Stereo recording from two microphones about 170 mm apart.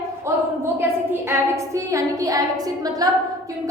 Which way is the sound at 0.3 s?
15° right (ahead or behind).